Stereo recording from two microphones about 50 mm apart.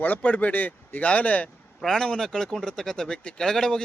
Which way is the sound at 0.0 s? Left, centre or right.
Left.